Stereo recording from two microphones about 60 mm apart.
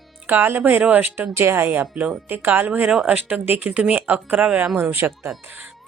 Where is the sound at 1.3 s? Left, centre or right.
Right.